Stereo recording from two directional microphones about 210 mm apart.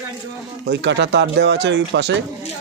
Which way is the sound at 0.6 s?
55° right (ahead or behind).